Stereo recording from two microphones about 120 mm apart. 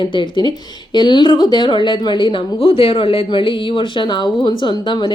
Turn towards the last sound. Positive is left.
turn(degrees=40)  # may be behind; listen again after turning